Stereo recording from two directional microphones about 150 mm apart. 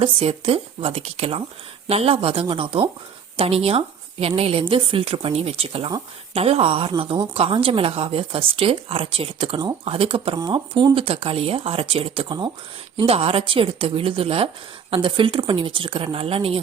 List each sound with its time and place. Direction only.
0.0 s speech: 40° right (ahead or behind)